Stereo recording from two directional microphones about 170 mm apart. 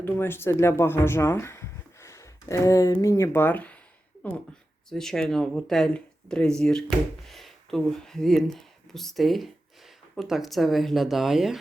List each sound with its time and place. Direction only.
0.0 s speech: 15° left (ahead or behind); by 11.5 s centre (ahead or behind)